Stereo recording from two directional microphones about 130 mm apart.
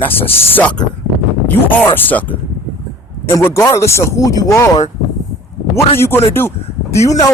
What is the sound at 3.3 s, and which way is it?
Speech, 20° left (ahead or behind).